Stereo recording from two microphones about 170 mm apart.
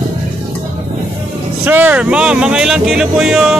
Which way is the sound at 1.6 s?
10° right (ahead or behind).